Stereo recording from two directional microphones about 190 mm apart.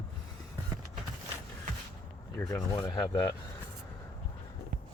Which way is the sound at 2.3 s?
15° left (ahead or behind).